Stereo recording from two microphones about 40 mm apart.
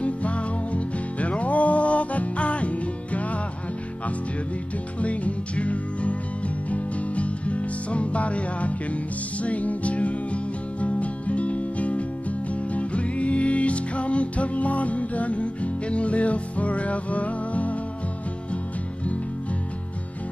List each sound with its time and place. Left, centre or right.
0.0 s music: left
5.0 s music: left